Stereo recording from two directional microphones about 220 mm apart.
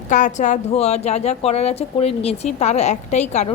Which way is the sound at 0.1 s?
35° left (ahead or behind).